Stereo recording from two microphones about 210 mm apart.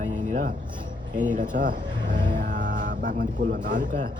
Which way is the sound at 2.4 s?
40° right (ahead or behind).